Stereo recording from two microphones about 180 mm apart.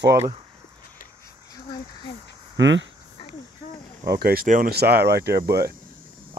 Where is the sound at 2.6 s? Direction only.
90° right.